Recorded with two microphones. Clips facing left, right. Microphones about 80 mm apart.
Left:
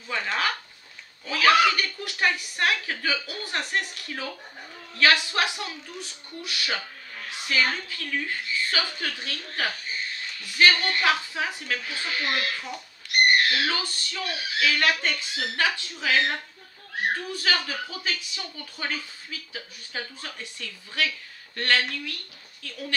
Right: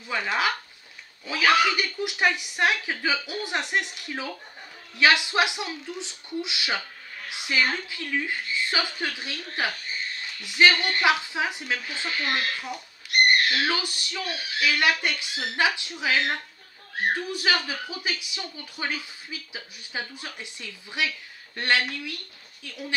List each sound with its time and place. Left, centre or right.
0.1 s speech: centre
17.3 s speech: centre